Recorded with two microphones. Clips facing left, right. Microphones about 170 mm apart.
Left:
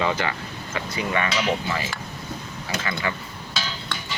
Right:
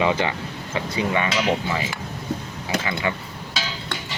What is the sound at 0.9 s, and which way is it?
Cutlery, 20° right (ahead or behind).